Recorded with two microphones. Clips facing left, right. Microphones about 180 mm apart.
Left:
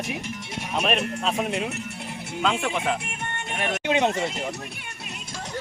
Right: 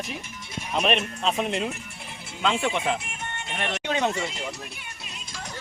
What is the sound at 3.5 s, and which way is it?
Music, 5° left (ahead or behind).